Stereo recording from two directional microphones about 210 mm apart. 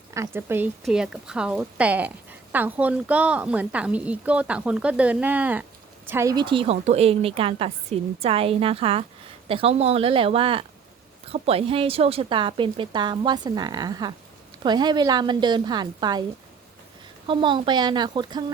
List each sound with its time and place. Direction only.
0.1 s a woman's voice: 10° right (ahead or behind)
17.2 s a woman's voice: 20° right (ahead or behind)